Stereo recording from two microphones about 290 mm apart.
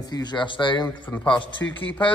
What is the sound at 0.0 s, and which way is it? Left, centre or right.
Speech, centre.